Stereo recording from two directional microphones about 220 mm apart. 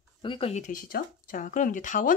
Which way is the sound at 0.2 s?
25° left (ahead or behind).